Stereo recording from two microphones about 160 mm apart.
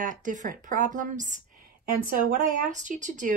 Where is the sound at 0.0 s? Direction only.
55° right (ahead or behind).